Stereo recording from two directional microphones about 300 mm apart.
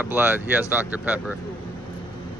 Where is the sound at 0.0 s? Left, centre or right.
Centre.